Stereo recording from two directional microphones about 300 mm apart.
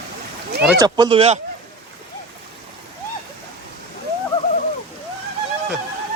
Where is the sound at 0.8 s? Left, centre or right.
Centre.